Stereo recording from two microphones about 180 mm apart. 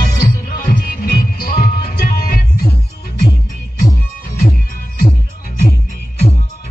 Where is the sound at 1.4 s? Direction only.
55° left (ahead or behind).